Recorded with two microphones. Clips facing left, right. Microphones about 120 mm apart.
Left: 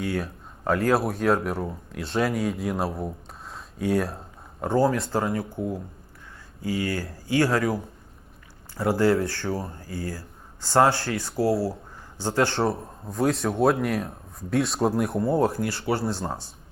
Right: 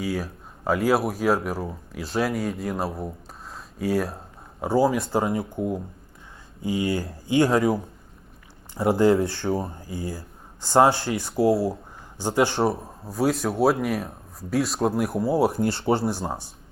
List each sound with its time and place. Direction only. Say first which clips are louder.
0.0 s speech: even; centre (ahead or behind)
3.5 s a sound: even; centre (ahead or behind)
4.6 s speech: right 1 dB; 10° right (ahead or behind)
5.1 s speech: right 2 dB; 20° right (ahead or behind)
12.7 s speech: even; 5° right (ahead or behind)
15.4 s speech: right 3 dB; 25° right (ahead or behind)